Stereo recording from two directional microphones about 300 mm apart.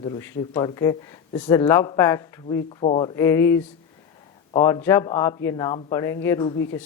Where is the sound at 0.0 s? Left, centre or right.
Centre.